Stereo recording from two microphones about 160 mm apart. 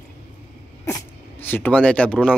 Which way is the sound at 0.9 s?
15° left (ahead or behind).